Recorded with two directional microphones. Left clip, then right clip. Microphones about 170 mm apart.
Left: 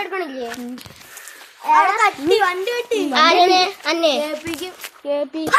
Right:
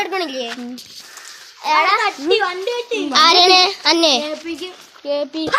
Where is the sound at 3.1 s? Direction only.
60° right (ahead or behind).